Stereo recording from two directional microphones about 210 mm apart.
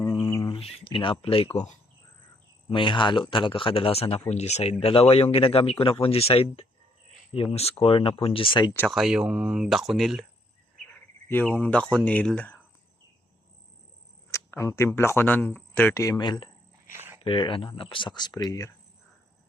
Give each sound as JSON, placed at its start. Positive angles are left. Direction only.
{"t": 0.0, "sound": "mantra", "side_deg": 25}
{"t": 0.3, "sound": "music", "side_deg": 15}
{"t": 2.6, "sound": "speech", "side_deg": 25}
{"t": 8.7, "sound": "speech", "side_deg": 10}
{"t": 9.0, "sound": "speech", "side_deg": -5}
{"t": 11.3, "sound": "speech", "side_deg": 5}
{"t": 14.3, "sound": "speech", "side_deg": 15}
{"t": 16.9, "sound": "a sound", "side_deg": -10}
{"t": 17.2, "sound": "speech", "side_deg": 25}